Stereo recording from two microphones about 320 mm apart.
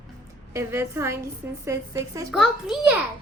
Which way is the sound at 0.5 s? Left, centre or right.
Centre.